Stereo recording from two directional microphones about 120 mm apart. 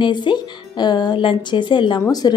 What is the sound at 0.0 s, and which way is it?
A woman's voice, 40° left (ahead or behind).